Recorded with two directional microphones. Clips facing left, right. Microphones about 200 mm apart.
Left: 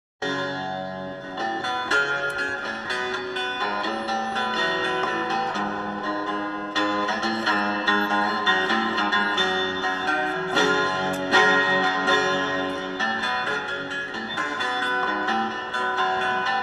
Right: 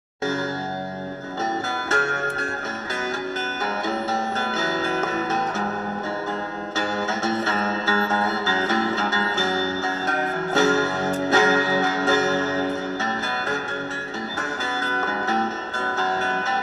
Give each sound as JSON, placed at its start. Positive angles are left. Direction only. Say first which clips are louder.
{"t": 1.9, "sound": "music", "louder": "right 5 dB", "side_deg": -45}
{"t": 4.4, "sound": "music", "louder": "right 2 dB", "side_deg": -45}
{"t": 6.7, "sound": "music", "louder": "even", "side_deg": -45}
{"t": 14.8, "sound": "music", "louder": "right 2 dB", "side_deg": -45}